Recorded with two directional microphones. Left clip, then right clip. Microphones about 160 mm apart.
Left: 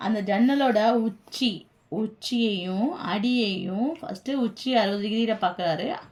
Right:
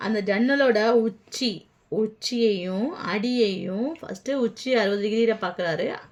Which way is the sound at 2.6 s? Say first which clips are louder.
Even; 35° right (ahead or behind).